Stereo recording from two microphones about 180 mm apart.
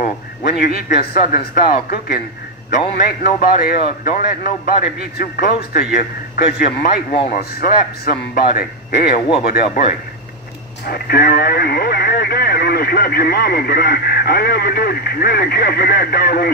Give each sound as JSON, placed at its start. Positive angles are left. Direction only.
{"t": 0.0, "sound": "a man's voice", "side_deg": 50}
{"t": 10.9, "sound": "speech", "side_deg": 60}